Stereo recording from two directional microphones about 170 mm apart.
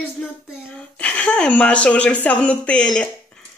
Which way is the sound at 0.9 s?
5° left (ahead or behind).